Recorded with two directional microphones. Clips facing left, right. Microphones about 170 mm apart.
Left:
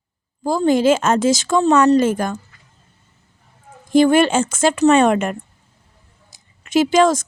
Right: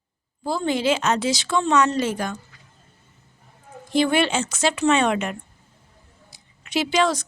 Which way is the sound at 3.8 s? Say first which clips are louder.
Left 7 dB; 45° left (ahead or behind).